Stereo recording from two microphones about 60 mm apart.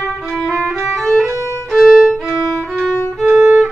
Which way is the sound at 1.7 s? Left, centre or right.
Centre.